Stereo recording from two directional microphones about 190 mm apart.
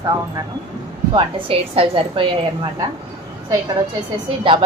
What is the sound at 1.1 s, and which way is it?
A woman's voice, 30° right (ahead or behind).